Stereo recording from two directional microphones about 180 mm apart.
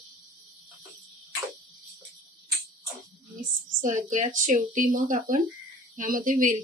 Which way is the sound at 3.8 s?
45° right (ahead or behind).